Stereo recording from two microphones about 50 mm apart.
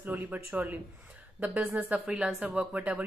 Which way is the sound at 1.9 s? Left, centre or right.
Right.